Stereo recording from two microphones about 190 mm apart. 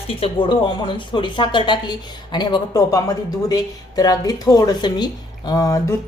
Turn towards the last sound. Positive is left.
turn(degrees=20)  # may be behind; listen again after turning